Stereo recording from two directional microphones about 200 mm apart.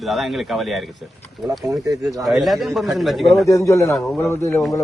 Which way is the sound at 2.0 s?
Centre (ahead or behind).